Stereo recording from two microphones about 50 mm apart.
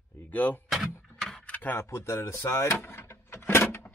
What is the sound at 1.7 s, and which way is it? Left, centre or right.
Speech, left.